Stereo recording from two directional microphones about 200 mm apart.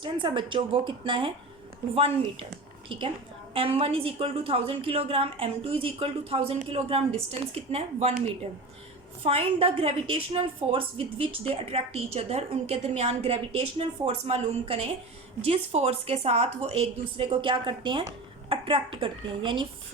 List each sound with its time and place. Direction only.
0.0 s a woman's voice: 25° right (ahead or behind)
2.9 s a woman's voice: 25° right (ahead or behind)
9.2 s a woman's voice: 30° right (ahead or behind)